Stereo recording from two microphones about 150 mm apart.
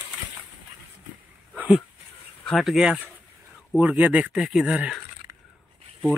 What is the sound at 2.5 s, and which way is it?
Speech, centre (ahead or behind).